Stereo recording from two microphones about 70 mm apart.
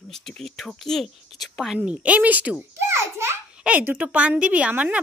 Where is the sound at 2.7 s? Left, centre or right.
Right.